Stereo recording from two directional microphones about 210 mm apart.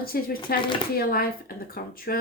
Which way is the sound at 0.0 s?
45° left (ahead or behind).